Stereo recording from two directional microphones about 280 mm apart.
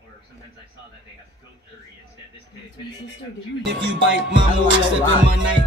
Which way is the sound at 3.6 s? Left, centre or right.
Right.